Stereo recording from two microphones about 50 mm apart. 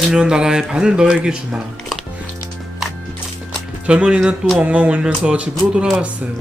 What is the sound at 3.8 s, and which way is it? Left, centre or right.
Speech, right.